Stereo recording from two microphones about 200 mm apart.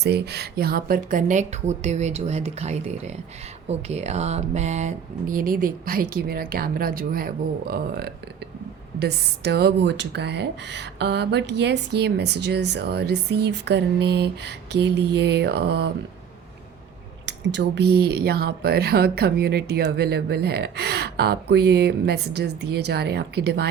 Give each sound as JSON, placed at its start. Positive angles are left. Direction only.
{"t": 0.0, "sound": "speech", "side_deg": -55}
{"t": 17.2, "sound": "speech", "side_deg": -60}